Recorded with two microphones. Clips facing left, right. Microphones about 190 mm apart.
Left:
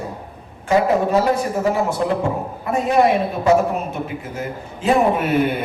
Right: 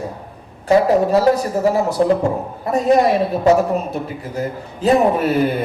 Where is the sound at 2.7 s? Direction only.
35° right (ahead or behind).